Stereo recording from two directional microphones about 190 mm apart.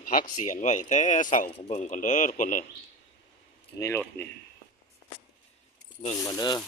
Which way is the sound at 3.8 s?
15° left (ahead or behind).